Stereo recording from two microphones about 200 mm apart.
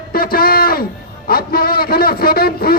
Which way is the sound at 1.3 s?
50° left (ahead or behind).